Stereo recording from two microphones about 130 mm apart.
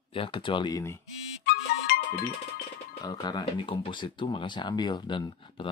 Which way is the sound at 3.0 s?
30° left (ahead or behind).